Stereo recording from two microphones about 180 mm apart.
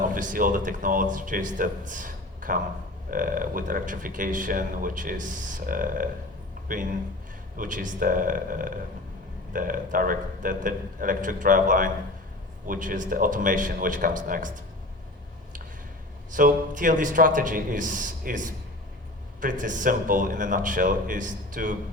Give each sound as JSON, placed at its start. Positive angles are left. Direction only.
{"t": 0.0, "sound": "speech", "side_deg": -45}
{"t": 16.3, "sound": "speech", "side_deg": -45}